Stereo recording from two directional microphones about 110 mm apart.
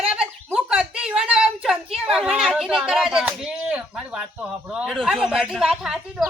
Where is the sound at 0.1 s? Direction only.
10° right (ahead or behind).